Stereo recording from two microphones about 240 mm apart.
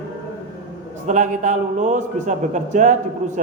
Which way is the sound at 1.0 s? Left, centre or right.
Right.